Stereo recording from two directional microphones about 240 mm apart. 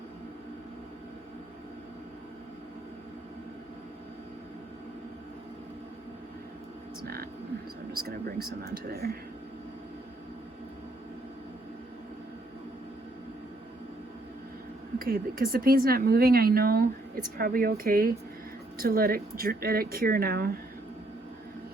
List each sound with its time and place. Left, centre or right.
7.0 s a sound: right
7.9 s a woman's voice: right
14.9 s a woman's voice: right